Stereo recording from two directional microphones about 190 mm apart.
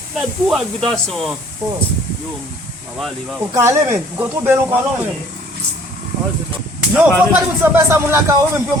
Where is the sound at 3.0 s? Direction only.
Centre (ahead or behind).